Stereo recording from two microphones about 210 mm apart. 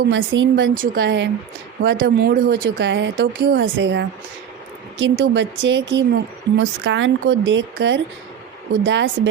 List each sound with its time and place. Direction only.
0.1 s a woman's voice: 60° right (ahead or behind)